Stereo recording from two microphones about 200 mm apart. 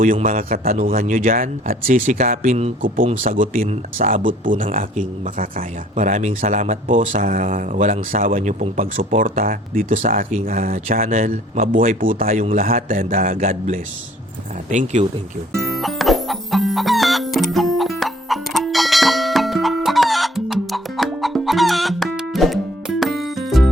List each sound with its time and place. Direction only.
0.0 s speech: 40° right (ahead or behind)
15.5 s music: centre (ahead or behind)